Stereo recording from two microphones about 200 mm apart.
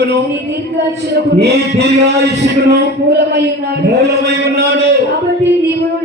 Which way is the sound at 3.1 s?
55° right (ahead or behind).